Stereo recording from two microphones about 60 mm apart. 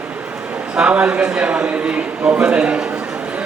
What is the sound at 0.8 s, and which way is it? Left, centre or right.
A man's voice, centre.